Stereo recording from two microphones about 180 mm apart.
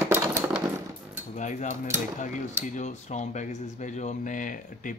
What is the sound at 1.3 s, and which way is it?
Speech, 40° left (ahead or behind).